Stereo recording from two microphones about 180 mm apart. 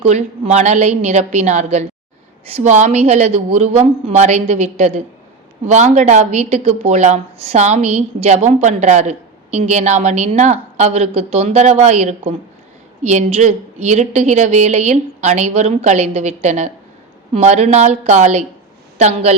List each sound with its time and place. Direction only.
0.0 s speech: 40° right (ahead or behind)